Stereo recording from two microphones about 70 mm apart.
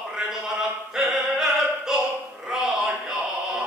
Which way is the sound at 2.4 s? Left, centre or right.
Centre.